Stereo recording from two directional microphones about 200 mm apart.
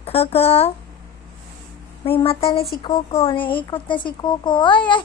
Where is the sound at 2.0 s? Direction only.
30° left (ahead or behind).